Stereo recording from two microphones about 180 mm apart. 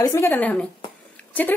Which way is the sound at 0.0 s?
15° left (ahead or behind).